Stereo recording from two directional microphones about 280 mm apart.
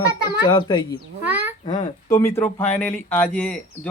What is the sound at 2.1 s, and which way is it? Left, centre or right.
Speech, centre.